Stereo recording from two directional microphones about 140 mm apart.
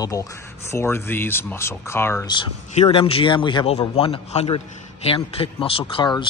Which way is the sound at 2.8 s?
45° left (ahead or behind).